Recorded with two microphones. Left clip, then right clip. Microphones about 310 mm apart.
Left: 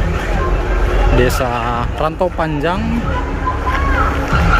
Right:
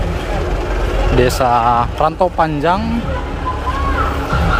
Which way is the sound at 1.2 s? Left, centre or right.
Centre.